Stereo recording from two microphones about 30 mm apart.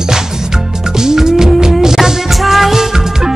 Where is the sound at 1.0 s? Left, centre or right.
Centre.